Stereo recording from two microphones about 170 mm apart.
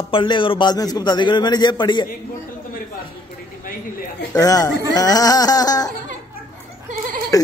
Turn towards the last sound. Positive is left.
turn(degrees=20)  # may be behind; listen again after turning